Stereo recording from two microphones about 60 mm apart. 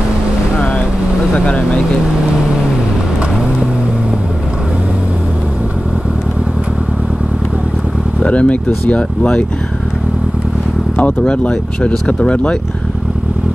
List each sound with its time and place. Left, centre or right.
1.3 s speech: centre
8.2 s speech: left
11.0 s speech: left